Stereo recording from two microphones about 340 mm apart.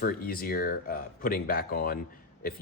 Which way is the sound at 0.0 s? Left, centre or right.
Left.